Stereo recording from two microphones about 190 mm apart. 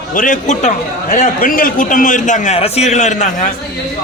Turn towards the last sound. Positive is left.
turn(degrees=40)  # may be behind; listen again after turning